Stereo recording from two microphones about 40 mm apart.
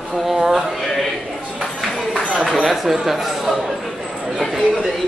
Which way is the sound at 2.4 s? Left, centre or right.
Centre.